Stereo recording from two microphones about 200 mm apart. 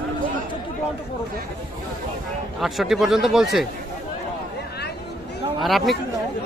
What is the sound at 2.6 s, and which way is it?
Speech, centre (ahead or behind).